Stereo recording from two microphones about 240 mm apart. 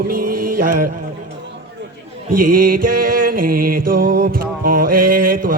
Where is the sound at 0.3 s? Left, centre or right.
Right.